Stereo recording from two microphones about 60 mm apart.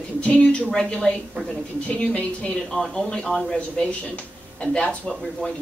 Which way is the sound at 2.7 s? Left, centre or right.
Centre.